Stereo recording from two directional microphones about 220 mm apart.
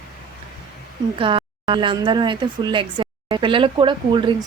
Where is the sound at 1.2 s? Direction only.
25° right (ahead or behind).